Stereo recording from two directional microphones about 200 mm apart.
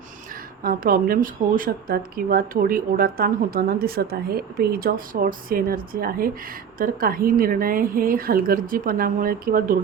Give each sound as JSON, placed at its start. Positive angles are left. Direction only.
{"t": 0.6, "sound": "speech", "side_deg": -45}